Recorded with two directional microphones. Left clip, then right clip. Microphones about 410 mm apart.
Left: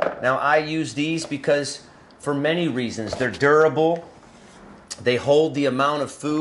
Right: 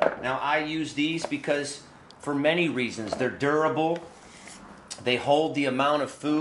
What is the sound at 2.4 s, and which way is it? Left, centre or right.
Speech, left.